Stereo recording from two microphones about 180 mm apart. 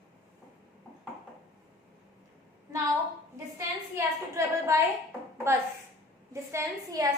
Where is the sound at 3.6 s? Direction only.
15° right (ahead or behind).